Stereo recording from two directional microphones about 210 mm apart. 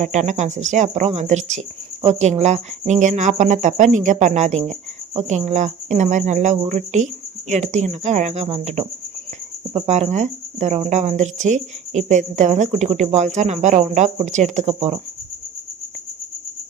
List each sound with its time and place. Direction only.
0.0 s speech: 35° right (ahead or behind)